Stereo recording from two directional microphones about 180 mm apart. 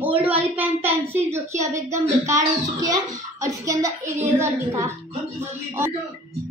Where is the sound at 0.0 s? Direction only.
10° right (ahead or behind).